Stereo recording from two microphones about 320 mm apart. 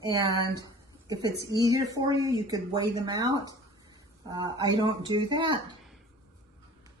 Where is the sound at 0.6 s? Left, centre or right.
Centre.